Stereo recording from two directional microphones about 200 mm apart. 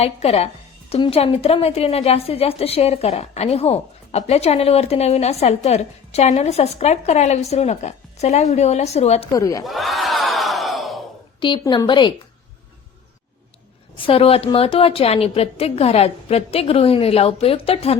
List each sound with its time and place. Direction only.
0.0 s a woman's voice: 30° left (ahead or behind)
9.3 s speech: 15° left (ahead or behind)
9.6 s crowd: centre (ahead or behind)
11.3 s a woman's voice: 25° left (ahead or behind)
13.9 s a woman's voice: 30° left (ahead or behind)